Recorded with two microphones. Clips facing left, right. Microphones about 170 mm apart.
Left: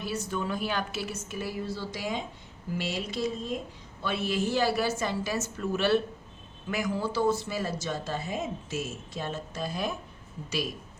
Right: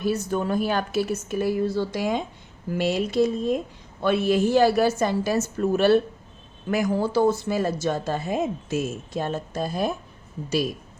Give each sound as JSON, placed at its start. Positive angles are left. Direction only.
{"t": 0.0, "sound": "a woman's voice", "side_deg": -45}